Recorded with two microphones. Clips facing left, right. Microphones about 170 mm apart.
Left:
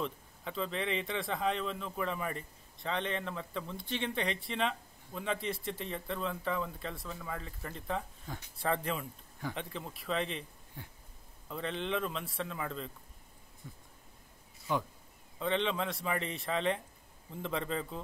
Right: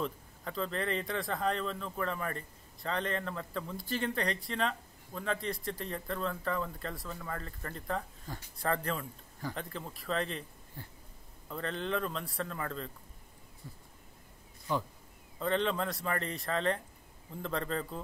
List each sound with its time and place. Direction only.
0.0 s speech: centre (ahead or behind)
15.3 s speech: centre (ahead or behind)